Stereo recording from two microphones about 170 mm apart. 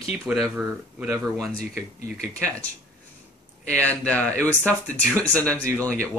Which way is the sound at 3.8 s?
10° left (ahead or behind).